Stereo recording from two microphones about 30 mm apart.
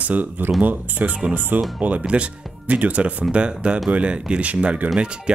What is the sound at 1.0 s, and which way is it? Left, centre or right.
Speech, right.